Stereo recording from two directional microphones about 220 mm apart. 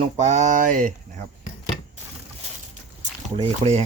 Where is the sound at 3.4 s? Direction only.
30° right (ahead or behind).